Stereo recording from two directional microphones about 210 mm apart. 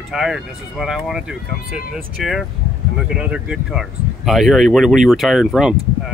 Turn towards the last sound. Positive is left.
turn(degrees=0)  # may be behind; listen again after turning